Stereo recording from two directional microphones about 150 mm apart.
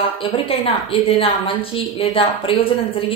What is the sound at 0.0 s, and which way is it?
A woman's voice, 40° left (ahead or behind).